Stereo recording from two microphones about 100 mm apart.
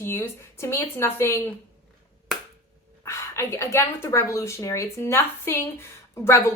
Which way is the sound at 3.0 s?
30° left (ahead or behind).